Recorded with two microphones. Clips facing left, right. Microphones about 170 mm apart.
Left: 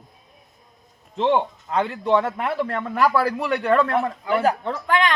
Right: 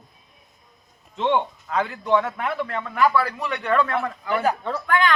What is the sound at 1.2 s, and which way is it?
A man's voice, 30° left (ahead or behind).